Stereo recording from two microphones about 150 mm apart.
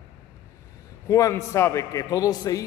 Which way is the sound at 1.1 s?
20° left (ahead or behind).